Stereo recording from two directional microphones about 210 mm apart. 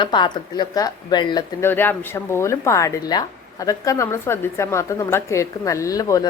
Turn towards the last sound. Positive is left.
turn(degrees=15)  # may be behind; listen again after turning